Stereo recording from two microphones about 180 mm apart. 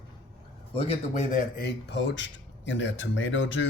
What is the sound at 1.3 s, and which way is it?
Speech, 60° left (ahead or behind).